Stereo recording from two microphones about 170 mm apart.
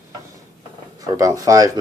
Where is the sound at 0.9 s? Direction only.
20° right (ahead or behind).